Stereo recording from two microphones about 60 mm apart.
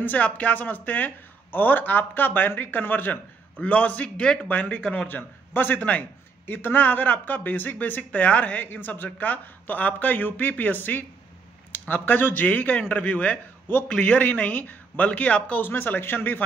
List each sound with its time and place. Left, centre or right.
0.0 s speech: left
5.0 s a man's voice: left